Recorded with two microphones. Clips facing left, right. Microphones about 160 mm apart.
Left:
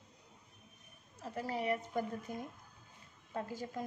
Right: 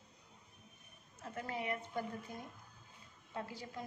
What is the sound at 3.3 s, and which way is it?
Speech, 45° left (ahead or behind).